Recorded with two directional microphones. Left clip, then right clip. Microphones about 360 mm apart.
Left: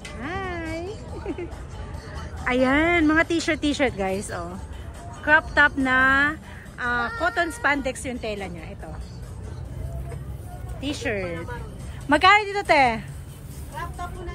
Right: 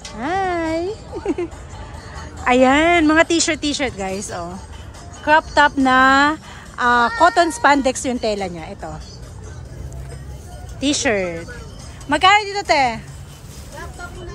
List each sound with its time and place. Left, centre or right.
0.2 s music: right
0.6 s a sound: right
2.4 s speech: centre
10.8 s speech: centre